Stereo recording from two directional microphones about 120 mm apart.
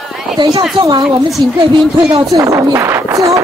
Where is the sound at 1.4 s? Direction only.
40° right (ahead or behind).